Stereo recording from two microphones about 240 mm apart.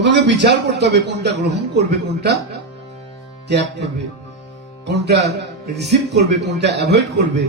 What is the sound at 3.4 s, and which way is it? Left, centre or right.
Speech, right.